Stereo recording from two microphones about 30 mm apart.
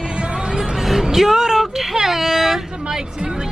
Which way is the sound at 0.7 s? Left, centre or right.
Centre.